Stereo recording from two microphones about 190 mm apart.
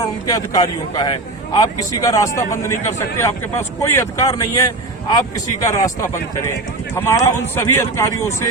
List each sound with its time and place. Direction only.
0.0 s a man's voice: 20° left (ahead or behind)
6.9 s a man's voice: 15° left (ahead or behind)